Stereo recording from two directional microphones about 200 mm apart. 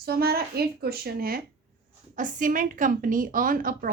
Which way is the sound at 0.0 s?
50° right (ahead or behind).